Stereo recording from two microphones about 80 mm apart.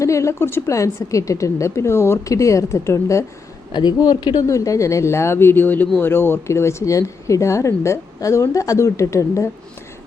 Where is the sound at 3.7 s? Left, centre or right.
Left.